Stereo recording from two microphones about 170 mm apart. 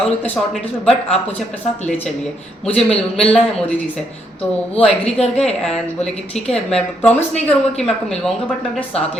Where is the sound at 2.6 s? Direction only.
5° left (ahead or behind).